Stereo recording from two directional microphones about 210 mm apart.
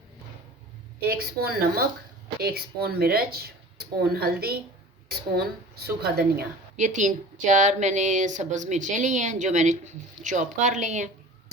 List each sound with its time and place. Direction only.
0.9 s speech: 45° right (ahead or behind)
5.8 s a woman's voice: 50° right (ahead or behind)